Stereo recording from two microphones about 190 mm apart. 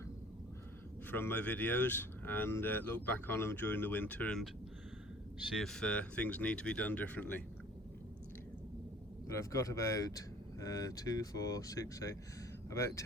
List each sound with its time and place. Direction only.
1.1 s speech: 10° left (ahead or behind)
5.5 s speech: centre (ahead or behind)
9.3 s speech: 15° left (ahead or behind)